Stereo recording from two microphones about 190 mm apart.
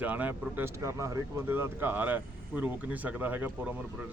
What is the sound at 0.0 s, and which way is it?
Speech, 10° right (ahead or behind).